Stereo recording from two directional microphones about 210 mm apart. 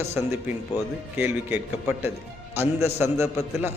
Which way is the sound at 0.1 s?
10° right (ahead or behind).